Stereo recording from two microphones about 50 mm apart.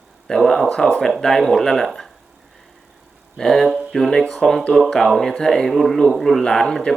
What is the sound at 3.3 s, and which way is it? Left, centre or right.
Speech, centre.